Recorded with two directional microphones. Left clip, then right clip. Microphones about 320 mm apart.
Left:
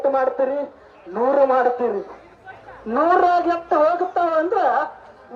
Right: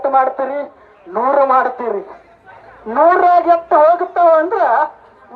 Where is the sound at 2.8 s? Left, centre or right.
Centre.